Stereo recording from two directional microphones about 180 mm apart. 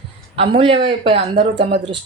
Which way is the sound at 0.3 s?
30° right (ahead or behind).